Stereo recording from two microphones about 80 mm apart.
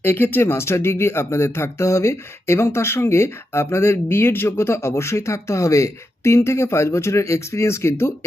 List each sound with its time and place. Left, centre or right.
0.0 s speech: left